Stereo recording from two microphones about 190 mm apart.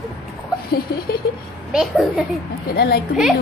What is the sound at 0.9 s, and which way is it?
Speech, 60° left (ahead or behind).